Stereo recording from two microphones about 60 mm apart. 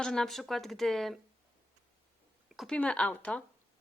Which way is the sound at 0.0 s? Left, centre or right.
Centre.